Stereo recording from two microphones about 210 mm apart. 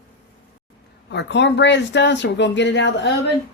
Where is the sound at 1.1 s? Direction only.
55° left (ahead or behind).